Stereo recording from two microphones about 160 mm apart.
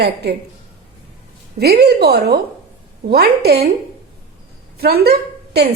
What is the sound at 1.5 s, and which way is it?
A woman's voice, 85° right.